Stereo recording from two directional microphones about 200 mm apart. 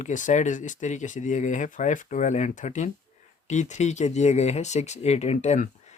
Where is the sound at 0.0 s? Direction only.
40° left (ahead or behind).